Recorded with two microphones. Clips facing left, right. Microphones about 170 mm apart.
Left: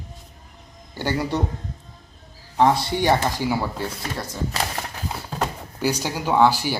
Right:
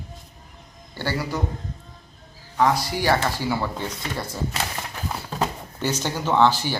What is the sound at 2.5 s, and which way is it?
Speech, 25° left (ahead or behind).